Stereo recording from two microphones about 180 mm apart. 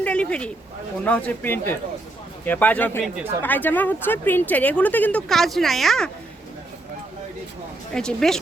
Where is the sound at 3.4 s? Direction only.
10° left (ahead or behind).